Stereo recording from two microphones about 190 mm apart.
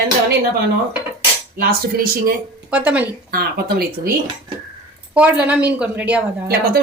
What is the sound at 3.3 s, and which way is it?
Speech, 50° right (ahead or behind).